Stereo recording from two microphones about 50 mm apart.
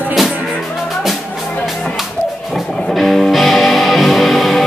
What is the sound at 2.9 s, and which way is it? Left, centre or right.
Music, centre.